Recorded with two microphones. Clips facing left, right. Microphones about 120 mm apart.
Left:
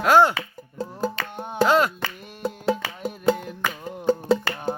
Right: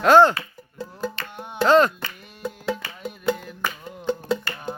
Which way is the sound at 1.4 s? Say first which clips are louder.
Left 4 dB; 35° left (ahead or behind).